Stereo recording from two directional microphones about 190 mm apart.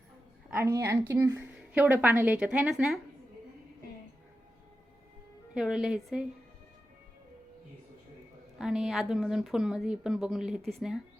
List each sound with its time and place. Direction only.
0.5 s a woman's voice: 15° right (ahead or behind)
5.5 s speech: 5° right (ahead or behind)
8.5 s speech: 5° right (ahead or behind)